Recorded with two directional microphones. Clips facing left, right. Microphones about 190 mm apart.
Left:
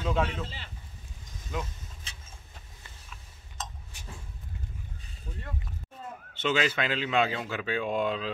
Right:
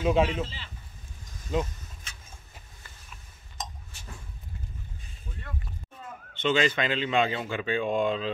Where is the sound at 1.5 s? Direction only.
25° right (ahead or behind).